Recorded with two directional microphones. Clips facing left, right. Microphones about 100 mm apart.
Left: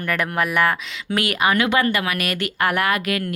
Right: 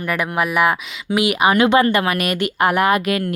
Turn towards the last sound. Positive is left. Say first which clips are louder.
# right 5 dB
turn(degrees=-25)  # may be behind; listen again after turning